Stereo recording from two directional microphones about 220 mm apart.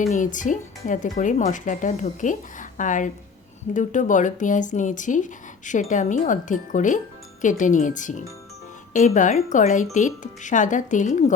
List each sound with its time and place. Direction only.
0.0 s speech: 35° left (ahead or behind)